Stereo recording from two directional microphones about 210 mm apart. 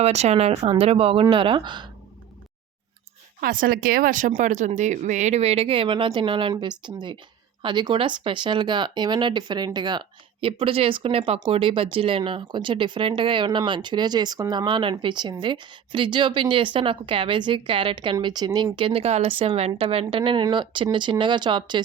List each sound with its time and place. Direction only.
0.0 s speech: 30° right (ahead or behind)
3.4 s speech: 45° right (ahead or behind); by 21.8 s 20° right (ahead or behind)